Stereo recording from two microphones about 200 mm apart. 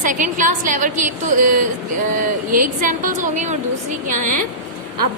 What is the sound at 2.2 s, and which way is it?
A woman's voice, 45° right (ahead or behind).